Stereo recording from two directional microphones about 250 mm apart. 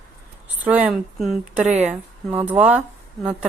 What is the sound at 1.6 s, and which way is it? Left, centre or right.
Speech, right.